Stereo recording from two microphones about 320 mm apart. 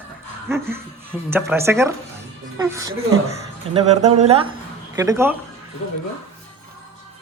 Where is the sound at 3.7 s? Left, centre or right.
Right.